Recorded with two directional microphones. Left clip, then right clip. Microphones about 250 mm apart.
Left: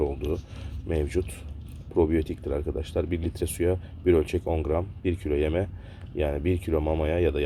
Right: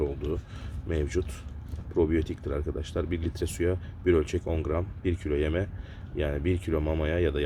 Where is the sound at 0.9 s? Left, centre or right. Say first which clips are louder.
Left 2 dB; centre.